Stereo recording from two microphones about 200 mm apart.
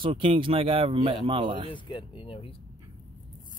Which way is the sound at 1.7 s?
25° left (ahead or behind).